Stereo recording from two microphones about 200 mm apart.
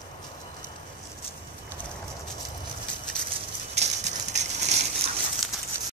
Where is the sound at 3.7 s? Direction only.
35° right (ahead or behind).